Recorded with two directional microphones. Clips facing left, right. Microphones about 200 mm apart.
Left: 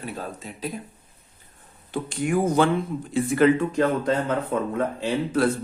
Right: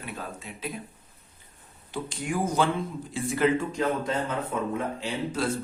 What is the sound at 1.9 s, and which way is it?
Speech, 60° left (ahead or behind).